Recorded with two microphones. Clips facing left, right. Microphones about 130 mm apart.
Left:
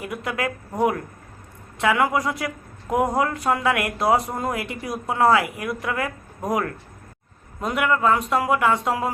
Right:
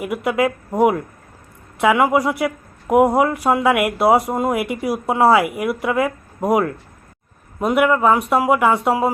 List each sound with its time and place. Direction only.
0.0 s speech: 25° right (ahead or behind)